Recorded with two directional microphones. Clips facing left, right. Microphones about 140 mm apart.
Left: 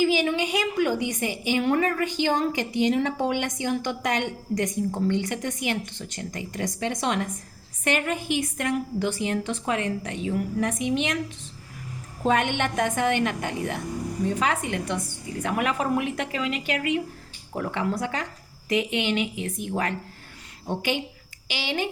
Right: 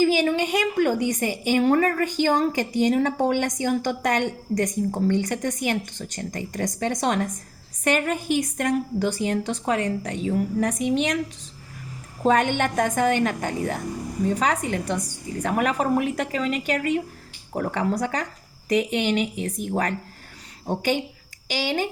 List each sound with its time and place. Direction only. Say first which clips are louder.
0.0 s a woman's voice: right 2 dB; 45° right (ahead or behind)
12.2 s a woman's voice: right 3 dB; 40° right (ahead or behind)